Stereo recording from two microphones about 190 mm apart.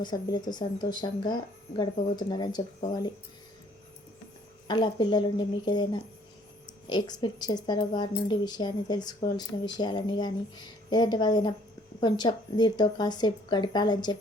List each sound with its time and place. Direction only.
0.0 s speech: 20° left (ahead or behind)
4.7 s speech: 20° left (ahead or behind)